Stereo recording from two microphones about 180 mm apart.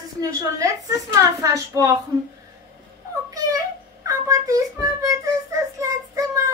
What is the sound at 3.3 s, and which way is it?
Child singing, 20° right (ahead or behind).